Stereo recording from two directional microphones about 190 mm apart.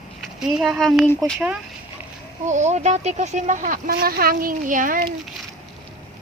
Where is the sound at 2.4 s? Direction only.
40° right (ahead or behind).